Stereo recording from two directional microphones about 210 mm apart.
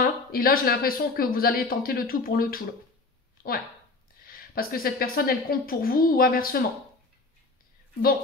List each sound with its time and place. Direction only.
0.0 s speech: 45° left (ahead or behind)
3.4 s a sound: 45° left (ahead or behind)
4.3 s speech: 45° left (ahead or behind)